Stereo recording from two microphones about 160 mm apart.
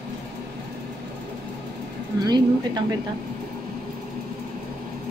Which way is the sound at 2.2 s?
25° right (ahead or behind).